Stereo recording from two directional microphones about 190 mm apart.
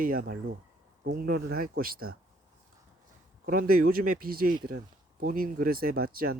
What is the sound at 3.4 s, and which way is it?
Speech, 50° right (ahead or behind).